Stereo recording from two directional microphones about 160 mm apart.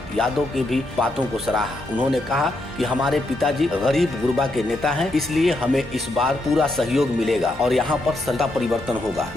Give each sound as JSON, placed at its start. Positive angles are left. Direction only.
{"t": 0.2, "sound": "speech", "side_deg": 0}